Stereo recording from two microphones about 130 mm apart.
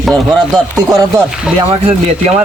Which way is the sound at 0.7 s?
25° right (ahead or behind).